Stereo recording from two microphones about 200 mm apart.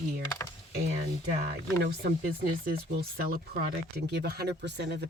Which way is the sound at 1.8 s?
50° right (ahead or behind).